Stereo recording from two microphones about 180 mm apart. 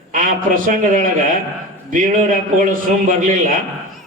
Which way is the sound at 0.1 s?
45° right (ahead or behind).